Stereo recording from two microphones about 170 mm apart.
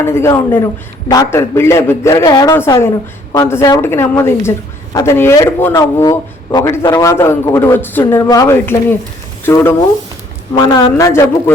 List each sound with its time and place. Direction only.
0.0 s a man's voice: 15° left (ahead or behind)